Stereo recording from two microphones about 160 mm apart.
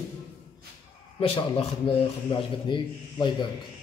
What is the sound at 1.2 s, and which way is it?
A man's voice, 35° left (ahead or behind).